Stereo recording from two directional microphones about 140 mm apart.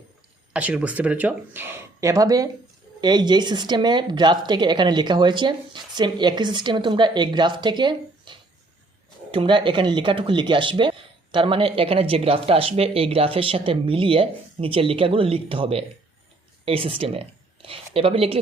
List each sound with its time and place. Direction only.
0.5 s speech: 10° right (ahead or behind); by 18.3 s 45° right (ahead or behind)